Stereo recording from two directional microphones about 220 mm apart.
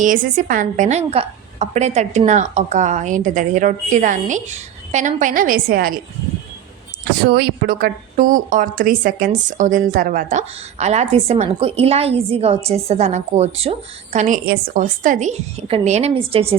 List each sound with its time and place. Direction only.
0.0 s a woman's voice: 35° right (ahead or behind)
7.0 s a woman's voice: 45° right (ahead or behind); by 16.6 s 25° right (ahead or behind)